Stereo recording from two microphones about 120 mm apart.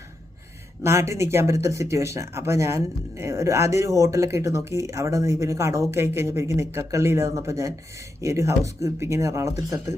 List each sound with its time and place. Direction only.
0.8 s speech: 25° right (ahead or behind)